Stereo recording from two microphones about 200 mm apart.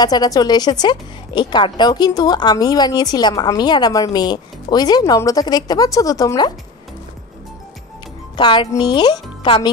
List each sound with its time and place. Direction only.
0.0 s a woman's voice: 20° left (ahead or behind)
8.4 s a woman's voice: 20° left (ahead or behind)